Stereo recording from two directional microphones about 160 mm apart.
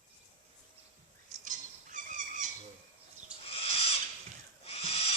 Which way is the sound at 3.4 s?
35° left (ahead or behind).